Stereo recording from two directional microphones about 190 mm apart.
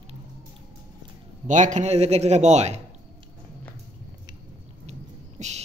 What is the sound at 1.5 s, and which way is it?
A man's voice, 40° right (ahead or behind).